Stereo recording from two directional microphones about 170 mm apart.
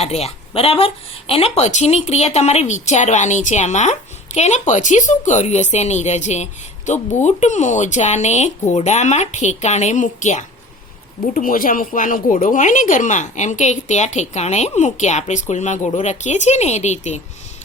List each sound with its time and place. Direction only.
0.0 s a woman's voice: 35° left (ahead or behind)